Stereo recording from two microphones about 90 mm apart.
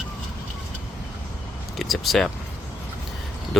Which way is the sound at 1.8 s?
Centre (ahead or behind).